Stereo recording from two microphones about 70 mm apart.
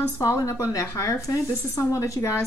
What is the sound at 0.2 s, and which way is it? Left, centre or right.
A woman's voice, left.